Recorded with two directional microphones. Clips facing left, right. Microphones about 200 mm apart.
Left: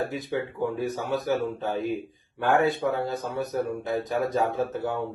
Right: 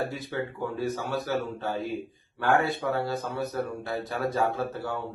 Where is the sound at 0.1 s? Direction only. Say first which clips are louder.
Left 3 dB; 15° left (ahead or behind).